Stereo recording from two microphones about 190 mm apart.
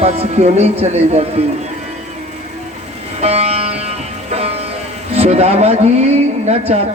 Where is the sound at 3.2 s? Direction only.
35° right (ahead or behind).